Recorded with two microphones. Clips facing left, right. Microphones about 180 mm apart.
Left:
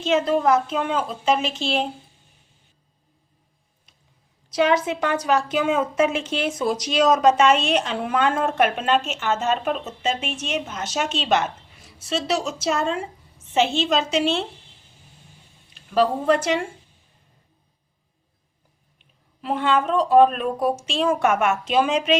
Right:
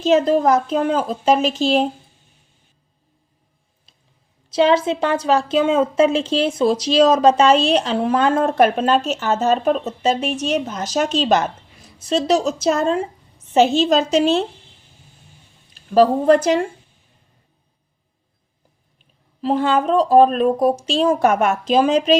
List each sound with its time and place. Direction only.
0.0 s a woman's voice: 40° right (ahead or behind)
4.5 s a woman's voice: 30° right (ahead or behind)
15.7 s a woman's voice: 40° right (ahead or behind)
18.9 s a woman's voice: 35° right (ahead or behind)